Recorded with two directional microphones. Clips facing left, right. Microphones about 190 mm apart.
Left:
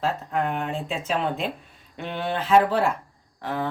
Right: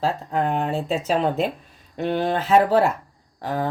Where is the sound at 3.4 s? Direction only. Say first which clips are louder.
Right 3 dB; 40° right (ahead or behind).